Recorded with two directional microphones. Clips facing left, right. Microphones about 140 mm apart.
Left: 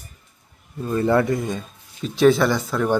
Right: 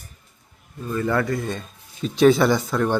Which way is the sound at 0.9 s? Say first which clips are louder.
Left 4 dB; 25° left (ahead or behind).